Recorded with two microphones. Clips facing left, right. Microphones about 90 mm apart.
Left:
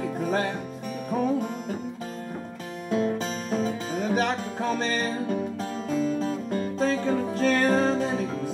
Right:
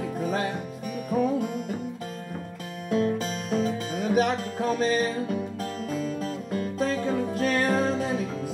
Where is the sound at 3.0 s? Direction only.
30° left (ahead or behind).